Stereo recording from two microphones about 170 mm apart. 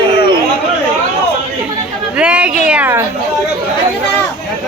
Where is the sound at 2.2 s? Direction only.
5° right (ahead or behind).